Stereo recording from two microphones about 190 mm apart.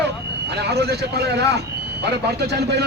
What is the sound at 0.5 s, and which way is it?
A man's voice, 60° right (ahead or behind).